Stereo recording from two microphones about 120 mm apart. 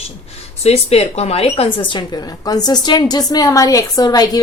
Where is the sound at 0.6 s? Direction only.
60° left (ahead or behind).